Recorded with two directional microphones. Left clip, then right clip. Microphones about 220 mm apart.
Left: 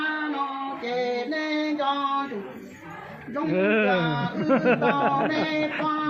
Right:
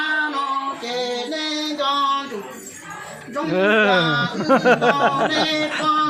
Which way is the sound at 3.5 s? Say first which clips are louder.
Right 6 dB; 20° right (ahead or behind).